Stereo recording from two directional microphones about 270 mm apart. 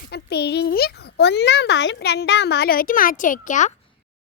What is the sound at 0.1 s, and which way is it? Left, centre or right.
Speech, left.